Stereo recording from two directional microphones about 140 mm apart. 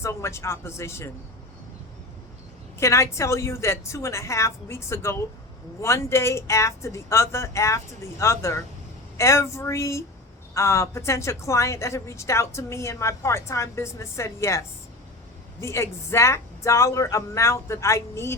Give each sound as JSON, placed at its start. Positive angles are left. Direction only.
{"t": 0.0, "sound": "a woman's voice", "side_deg": 20}
{"t": 2.7, "sound": "a woman's voice", "side_deg": 20}
{"t": 15.6, "sound": "a woman's voice", "side_deg": 20}